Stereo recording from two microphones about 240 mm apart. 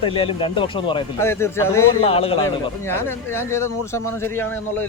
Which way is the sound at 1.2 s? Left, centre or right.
Centre.